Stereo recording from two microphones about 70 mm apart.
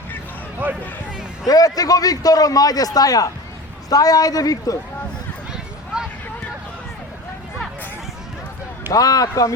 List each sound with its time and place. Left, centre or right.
0.6 s speech: right
1.5 s a man's voice: left
8.9 s a man's voice: left